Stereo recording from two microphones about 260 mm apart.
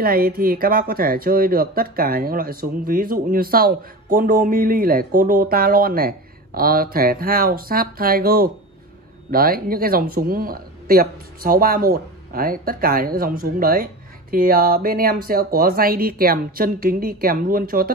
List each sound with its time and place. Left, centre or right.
0.0 s speech: right